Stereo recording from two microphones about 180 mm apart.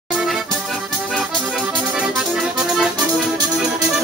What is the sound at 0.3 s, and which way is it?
Accordion, centre (ahead or behind).